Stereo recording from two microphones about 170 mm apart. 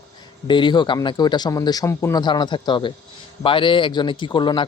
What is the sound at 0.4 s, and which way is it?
A man's voice, 30° left (ahead or behind).